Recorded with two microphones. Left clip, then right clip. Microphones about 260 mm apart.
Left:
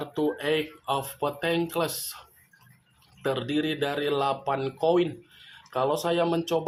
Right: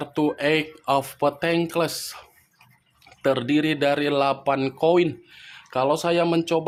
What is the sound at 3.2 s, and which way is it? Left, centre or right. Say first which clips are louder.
Speech: right 6 dB; right.